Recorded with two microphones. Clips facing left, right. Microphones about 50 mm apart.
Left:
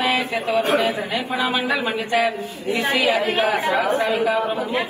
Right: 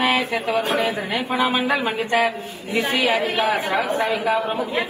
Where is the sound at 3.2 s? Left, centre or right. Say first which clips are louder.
Left 1 dB; left.